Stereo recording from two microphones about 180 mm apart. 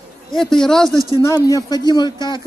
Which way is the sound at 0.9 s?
20° right (ahead or behind).